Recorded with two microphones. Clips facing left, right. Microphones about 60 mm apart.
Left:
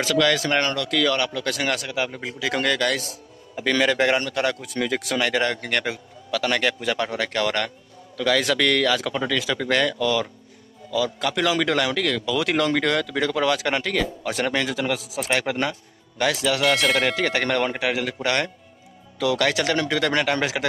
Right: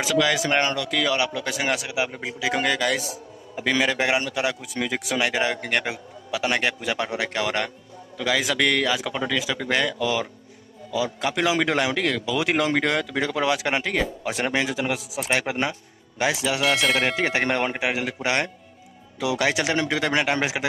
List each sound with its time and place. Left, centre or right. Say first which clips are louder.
0.0 s speech: left 1 dB; centre
10.9 s speech: left 1 dB; right
16.8 s speech: left 1 dB; centre
17.1 s speech: even; centre